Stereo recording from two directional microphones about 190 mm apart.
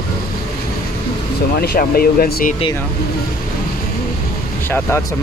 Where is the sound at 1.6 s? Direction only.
55° left (ahead or behind).